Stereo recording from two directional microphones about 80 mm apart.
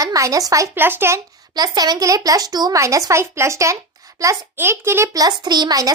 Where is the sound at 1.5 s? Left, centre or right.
Right.